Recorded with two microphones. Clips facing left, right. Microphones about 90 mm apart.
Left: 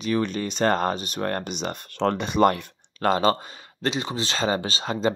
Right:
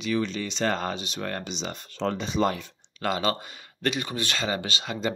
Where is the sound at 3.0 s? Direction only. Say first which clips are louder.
Left 6 dB; 40° left (ahead or behind).